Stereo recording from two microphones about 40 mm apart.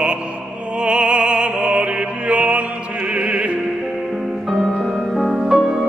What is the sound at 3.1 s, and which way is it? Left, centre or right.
Opera, right.